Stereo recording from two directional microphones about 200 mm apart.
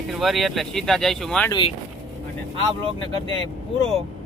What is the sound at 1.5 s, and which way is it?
Speech, 25° left (ahead or behind).